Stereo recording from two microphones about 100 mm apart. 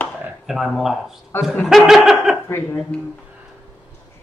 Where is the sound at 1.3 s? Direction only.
20° left (ahead or behind).